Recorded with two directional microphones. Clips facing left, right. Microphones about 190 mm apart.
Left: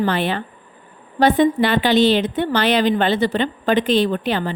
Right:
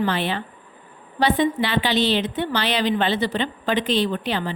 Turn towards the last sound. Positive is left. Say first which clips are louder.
# left 4 dB
turn(degrees=50)  # may be behind; listen again after turning